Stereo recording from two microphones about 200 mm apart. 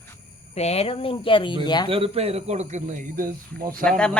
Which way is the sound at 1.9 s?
30° right (ahead or behind).